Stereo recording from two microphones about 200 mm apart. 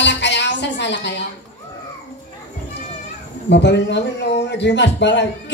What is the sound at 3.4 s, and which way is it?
Speech, 60° left (ahead or behind).